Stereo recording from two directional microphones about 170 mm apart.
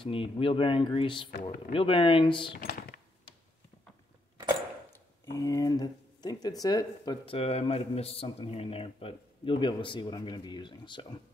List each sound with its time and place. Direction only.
0.0 s speech: 30° left (ahead or behind)
4.9 s speech: 15° left (ahead or behind)